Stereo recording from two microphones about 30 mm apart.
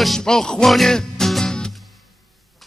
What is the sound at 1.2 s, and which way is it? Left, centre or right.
Music, centre.